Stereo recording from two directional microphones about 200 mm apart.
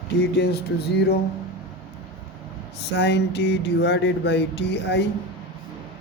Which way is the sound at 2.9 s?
60° left (ahead or behind).